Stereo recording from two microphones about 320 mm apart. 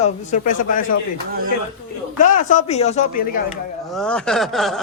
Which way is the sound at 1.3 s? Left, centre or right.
Right.